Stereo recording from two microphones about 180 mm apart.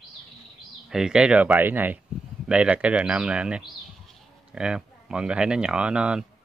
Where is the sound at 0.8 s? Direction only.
5° right (ahead or behind).